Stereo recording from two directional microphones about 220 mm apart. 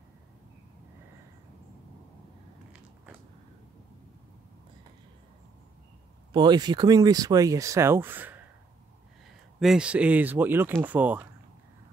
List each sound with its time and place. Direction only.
6.3 s speech: 20° right (ahead or behind)
9.6 s speech: 5° right (ahead or behind)